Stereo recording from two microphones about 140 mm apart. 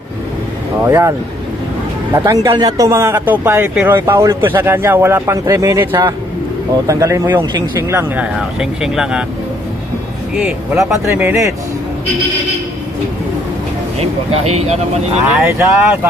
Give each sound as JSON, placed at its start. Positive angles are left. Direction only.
{"t": 0.9, "sound": "speech", "side_deg": -20}
{"t": 2.1, "sound": "speech", "side_deg": -25}
{"t": 10.3, "sound": "speech", "side_deg": -5}
{"t": 14.0, "sound": "speech", "side_deg": -50}
{"t": 15.4, "sound": "speech", "side_deg": -15}